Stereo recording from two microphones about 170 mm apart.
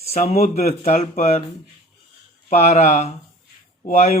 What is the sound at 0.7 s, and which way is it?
Speech, 55° left (ahead or behind).